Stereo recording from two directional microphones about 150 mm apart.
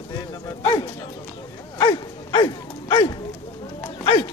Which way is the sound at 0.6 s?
35° left (ahead or behind).